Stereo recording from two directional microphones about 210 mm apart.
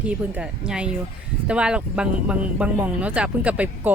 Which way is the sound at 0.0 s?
5° right (ahead or behind).